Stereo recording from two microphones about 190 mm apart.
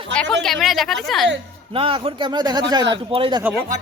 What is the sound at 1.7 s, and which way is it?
Speech, 30° right (ahead or behind).